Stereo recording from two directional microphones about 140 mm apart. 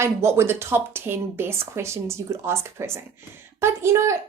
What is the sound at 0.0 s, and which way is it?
A woman's voice, 20° right (ahead or behind).